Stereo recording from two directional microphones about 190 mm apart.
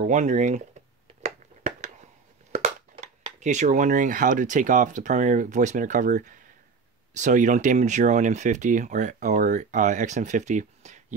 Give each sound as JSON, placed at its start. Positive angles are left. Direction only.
{"t": 0.0, "sound": "speech", "side_deg": -40}
{"t": 1.2, "sound": "a sound", "side_deg": -40}
{"t": 3.3, "sound": "speech", "side_deg": -40}